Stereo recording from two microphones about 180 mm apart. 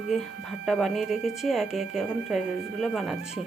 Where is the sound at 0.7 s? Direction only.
Centre (ahead or behind).